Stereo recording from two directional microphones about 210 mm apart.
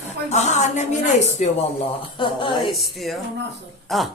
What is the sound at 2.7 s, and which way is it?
A woman's voice, centre (ahead or behind).